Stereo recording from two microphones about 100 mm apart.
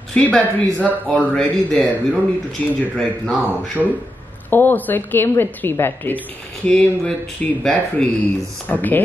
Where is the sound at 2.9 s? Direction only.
5° left (ahead or behind).